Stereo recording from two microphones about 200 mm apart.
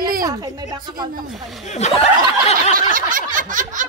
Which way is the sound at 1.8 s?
35° left (ahead or behind).